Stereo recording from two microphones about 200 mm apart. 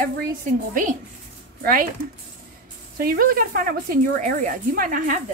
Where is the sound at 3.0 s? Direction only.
45° right (ahead or behind).